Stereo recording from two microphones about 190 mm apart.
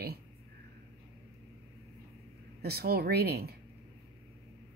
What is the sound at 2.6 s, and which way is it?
Speech, 55° right (ahead or behind).